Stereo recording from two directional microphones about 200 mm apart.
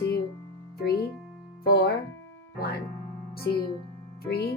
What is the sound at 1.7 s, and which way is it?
Speech, 50° left (ahead or behind).